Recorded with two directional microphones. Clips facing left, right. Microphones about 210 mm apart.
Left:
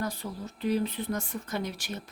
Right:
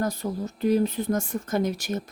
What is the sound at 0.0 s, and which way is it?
Speech, 45° right (ahead or behind).